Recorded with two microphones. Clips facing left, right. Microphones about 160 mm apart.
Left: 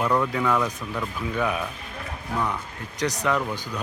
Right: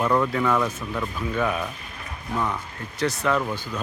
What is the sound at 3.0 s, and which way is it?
Speech, 15° left (ahead or behind).